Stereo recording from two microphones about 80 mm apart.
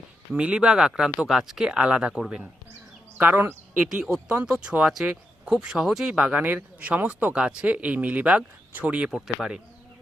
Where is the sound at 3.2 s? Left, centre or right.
Right.